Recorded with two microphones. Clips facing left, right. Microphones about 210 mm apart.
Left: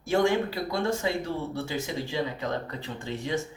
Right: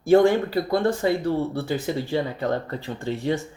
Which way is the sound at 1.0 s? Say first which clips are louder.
Right 7 dB; 45° right (ahead or behind).